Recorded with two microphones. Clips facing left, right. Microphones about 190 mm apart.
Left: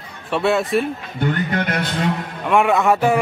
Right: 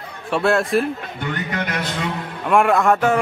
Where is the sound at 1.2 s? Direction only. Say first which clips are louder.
Left 5 dB; 45° left (ahead or behind).